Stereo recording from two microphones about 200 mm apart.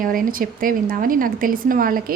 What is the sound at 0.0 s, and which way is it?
A woman's voice, 45° right (ahead or behind).